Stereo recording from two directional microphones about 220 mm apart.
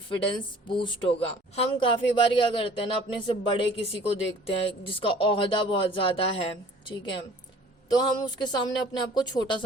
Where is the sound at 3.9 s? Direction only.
25° left (ahead or behind).